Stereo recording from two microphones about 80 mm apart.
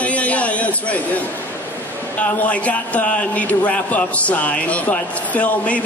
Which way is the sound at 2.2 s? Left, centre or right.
Centre.